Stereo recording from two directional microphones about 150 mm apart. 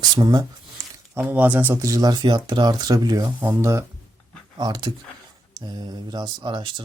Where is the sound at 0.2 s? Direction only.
25° right (ahead or behind).